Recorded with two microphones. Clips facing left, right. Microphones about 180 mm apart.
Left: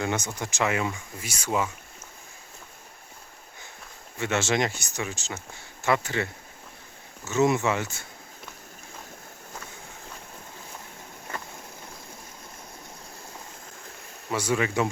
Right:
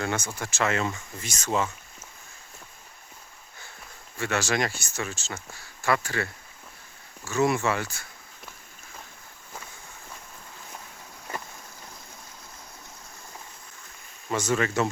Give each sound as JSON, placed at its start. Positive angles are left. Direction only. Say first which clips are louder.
{"t": 0.0, "sound": "speech", "louder": "left 1 dB", "side_deg": 15}
{"t": 4.2, "sound": "speech", "louder": "left 1 dB", "side_deg": 20}
{"t": 7.3, "sound": "speech", "louder": "left 1 dB", "side_deg": 20}
{"t": 14.3, "sound": "speech", "louder": "even", "side_deg": 10}